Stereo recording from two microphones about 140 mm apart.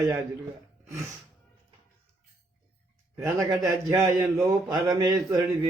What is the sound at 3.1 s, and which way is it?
Speech, 20° right (ahead or behind).